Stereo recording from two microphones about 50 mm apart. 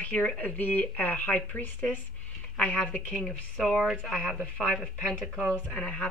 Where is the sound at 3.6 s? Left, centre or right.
Centre.